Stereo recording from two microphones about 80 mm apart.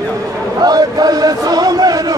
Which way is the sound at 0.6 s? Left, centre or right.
Right.